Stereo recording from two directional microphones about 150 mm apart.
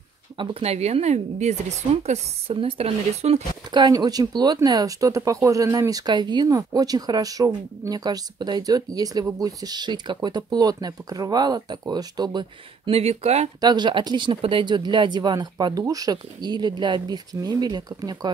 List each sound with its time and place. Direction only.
0.4 s speech: 45° right (ahead or behind)
3.7 s speech: 25° right (ahead or behind); by 13.5 s 45° right (ahead or behind)
13.6 s speech: 30° right (ahead or behind)